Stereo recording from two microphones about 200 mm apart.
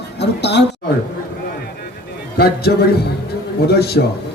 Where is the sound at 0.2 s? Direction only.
60° left (ahead or behind).